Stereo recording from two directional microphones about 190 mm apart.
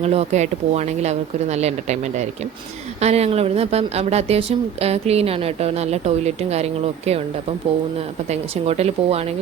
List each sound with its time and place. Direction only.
0.0 s speech: 35° right (ahead or behind)